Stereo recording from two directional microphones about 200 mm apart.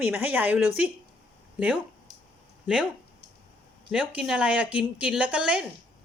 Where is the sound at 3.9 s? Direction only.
5° right (ahead or behind).